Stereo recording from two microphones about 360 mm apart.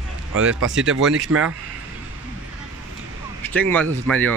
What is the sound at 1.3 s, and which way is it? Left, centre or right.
Speech, right.